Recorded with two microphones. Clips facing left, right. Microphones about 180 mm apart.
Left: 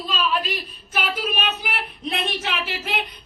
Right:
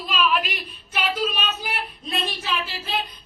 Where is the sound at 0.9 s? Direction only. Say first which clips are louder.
Right 1 dB; 60° left (ahead or behind).